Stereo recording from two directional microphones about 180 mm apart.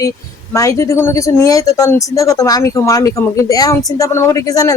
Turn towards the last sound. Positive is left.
turn(degrees=20)  # may be behind; listen again after turning